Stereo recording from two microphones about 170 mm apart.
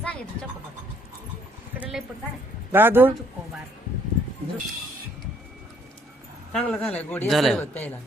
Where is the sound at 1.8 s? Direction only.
5° right (ahead or behind).